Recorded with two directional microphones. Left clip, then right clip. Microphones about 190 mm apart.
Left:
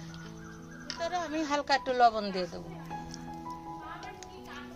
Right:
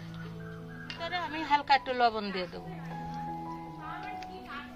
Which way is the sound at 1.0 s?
55° left (ahead or behind).